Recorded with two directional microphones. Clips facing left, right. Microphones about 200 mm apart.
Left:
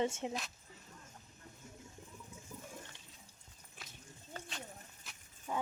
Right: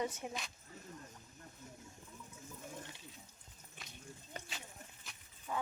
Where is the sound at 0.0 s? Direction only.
25° left (ahead or behind).